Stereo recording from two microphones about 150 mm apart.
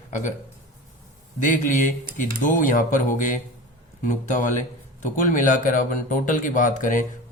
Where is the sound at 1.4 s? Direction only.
60° left (ahead or behind).